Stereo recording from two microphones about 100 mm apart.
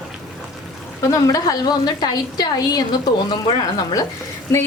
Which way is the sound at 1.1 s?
35° left (ahead or behind).